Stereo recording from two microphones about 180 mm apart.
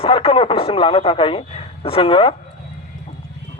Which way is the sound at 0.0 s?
30° left (ahead or behind).